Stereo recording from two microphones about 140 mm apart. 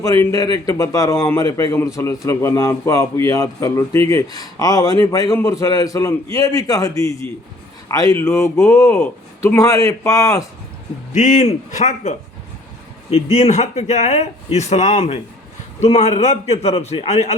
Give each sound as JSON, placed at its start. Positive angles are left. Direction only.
{"t": 0.0, "sound": "a man's voice", "side_deg": 20}
{"t": 11.1, "sound": "a man's voice", "side_deg": 60}